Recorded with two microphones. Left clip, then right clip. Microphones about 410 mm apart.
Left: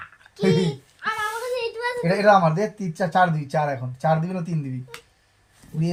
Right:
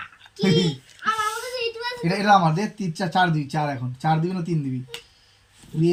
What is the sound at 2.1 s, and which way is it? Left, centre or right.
Speech, centre.